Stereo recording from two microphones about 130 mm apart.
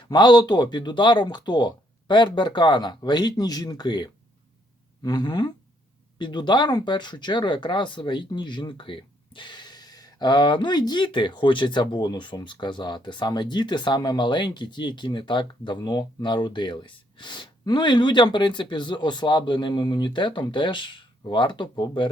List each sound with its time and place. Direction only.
0.0 s speech: 35° left (ahead or behind)